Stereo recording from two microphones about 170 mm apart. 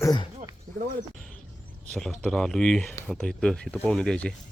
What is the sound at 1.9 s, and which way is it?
Speech, 5° left (ahead or behind).